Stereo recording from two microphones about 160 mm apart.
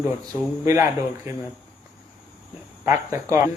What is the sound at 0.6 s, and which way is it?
Speech, 20° right (ahead or behind).